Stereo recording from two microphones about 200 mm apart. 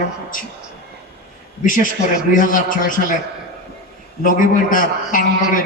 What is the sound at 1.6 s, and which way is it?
A man's voice, 40° left (ahead or behind).